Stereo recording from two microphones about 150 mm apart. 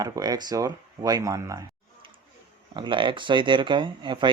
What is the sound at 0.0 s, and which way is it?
Speech, 25° right (ahead or behind).